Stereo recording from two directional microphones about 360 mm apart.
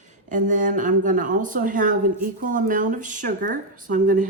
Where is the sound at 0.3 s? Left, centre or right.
Right.